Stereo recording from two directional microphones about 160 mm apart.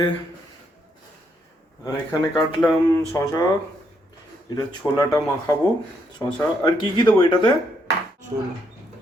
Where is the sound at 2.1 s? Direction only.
20° left (ahead or behind).